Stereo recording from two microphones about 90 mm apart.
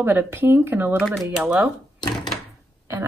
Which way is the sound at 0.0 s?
25° right (ahead or behind).